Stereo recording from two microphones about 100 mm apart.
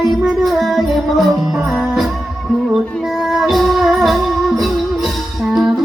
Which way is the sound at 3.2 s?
Centre (ahead or behind).